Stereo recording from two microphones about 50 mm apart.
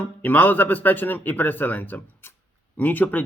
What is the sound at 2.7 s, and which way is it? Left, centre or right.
Speech, left.